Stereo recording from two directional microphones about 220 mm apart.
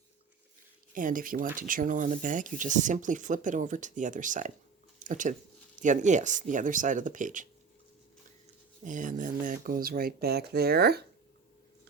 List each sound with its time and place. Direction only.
0.9 s speech: 40° right (ahead or behind)
4.9 s a sound: 35° right (ahead or behind)
5.8 s speech: 35° right (ahead or behind)
8.8 s speech: 35° right (ahead or behind)